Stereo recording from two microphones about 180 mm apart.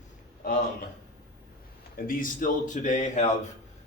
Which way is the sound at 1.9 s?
50° left (ahead or behind).